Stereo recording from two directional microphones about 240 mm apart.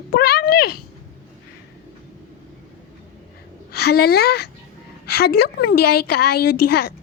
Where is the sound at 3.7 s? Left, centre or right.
Left.